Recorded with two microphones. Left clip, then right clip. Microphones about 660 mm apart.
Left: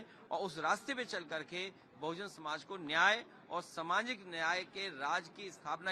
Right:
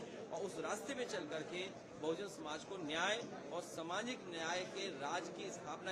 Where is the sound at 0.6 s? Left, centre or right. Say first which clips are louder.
Left 9 dB; left.